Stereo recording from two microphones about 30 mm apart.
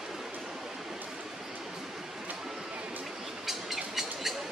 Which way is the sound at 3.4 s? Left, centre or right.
Centre.